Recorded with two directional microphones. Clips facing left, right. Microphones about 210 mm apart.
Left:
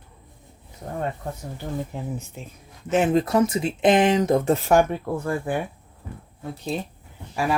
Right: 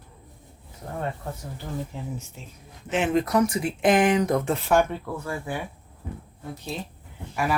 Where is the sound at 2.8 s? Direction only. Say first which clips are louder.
Left 3 dB; 40° left (ahead or behind).